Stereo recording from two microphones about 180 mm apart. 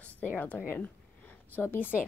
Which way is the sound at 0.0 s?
10° left (ahead or behind).